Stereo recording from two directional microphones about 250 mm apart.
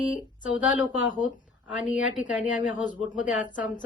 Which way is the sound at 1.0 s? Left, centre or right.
Centre.